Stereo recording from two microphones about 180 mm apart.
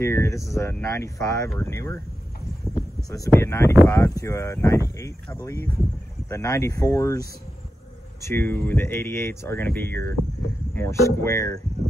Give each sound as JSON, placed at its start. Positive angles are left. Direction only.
{"t": 0.0, "sound": "speech", "side_deg": 15}
{"t": 3.1, "sound": "speech", "side_deg": 15}
{"t": 8.2, "sound": "speech", "side_deg": 15}